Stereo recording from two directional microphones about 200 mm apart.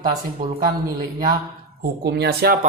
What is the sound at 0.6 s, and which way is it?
Speech, 20° right (ahead or behind).